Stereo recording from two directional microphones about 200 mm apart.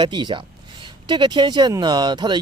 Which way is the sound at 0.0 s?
20° right (ahead or behind).